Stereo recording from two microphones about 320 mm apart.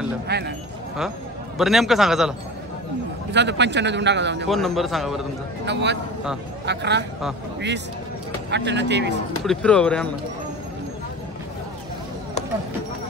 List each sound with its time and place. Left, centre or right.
0.3 s speech: right
1.6 s a man's voice: centre
3.3 s speech: right
4.5 s a man's voice: centre
5.7 s speech: right
8.5 s speech: right
9.4 s a man's voice: centre